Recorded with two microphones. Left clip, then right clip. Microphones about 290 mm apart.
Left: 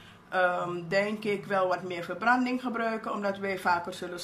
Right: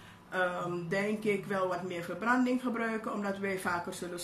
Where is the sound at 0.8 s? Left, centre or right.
Centre.